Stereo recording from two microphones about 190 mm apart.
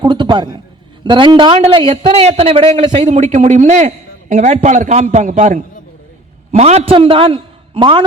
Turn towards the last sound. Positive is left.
turn(degrees=-30)  # may be behind; listen again after turning